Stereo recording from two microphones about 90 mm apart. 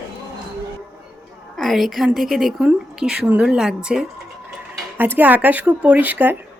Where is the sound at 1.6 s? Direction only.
Centre (ahead or behind).